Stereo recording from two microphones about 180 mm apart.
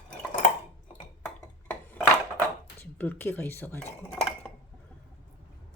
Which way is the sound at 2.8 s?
10° left (ahead or behind).